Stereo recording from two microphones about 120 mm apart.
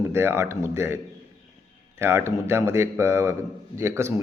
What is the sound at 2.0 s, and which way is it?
A man's voice, 20° right (ahead or behind).